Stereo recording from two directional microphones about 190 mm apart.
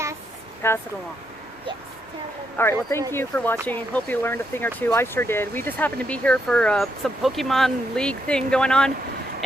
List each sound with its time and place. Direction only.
0.6 s speech: 10° left (ahead or behind)
2.6 s speech: 10° left (ahead or behind)